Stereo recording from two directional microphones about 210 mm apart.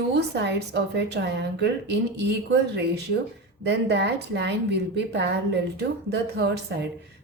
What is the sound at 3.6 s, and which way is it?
A woman's voice, 55° right (ahead or behind).